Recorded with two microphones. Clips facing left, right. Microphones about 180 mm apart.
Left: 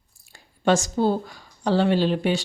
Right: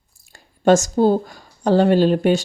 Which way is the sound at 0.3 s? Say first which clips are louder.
Right 6 dB; 45° right (ahead or behind).